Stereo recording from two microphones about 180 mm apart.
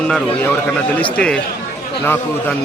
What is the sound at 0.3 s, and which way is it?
A man's voice, 10° left (ahead or behind).